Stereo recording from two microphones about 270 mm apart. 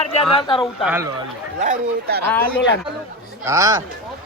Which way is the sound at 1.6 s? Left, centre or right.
Right.